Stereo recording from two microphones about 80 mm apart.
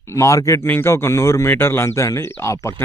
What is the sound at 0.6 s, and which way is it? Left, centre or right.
Speech, left.